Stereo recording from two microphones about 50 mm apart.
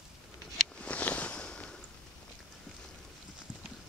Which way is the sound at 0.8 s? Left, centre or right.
Left.